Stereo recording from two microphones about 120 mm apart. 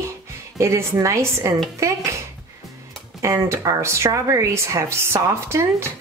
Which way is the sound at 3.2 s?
25° right (ahead or behind).